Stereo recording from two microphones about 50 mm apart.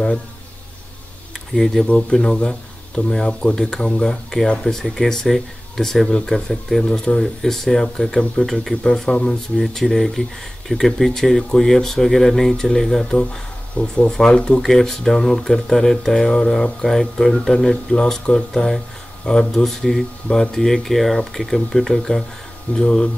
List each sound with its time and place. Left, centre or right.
1.5 s speech: centre
3.4 s speech: left
4.0 s speech: centre
13.1 s speech: centre